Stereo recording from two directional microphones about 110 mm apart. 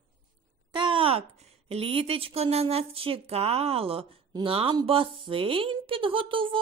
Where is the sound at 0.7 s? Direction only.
45° right (ahead or behind).